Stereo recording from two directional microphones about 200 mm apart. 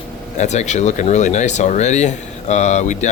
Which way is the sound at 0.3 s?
35° left (ahead or behind).